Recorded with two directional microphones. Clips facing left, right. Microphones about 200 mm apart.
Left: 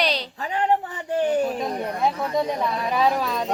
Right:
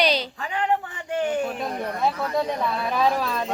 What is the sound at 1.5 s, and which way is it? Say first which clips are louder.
Speech: left 2 dB; 20° left (ahead or behind).